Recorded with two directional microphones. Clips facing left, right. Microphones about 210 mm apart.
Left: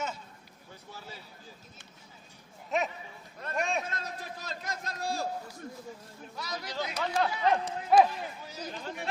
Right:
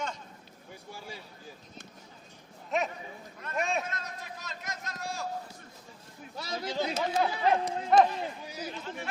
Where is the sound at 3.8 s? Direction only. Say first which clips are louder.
Left 1 dB; 30° left (ahead or behind).